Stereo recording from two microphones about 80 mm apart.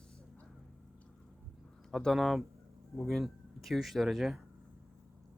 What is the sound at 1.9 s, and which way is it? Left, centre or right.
Speech, centre.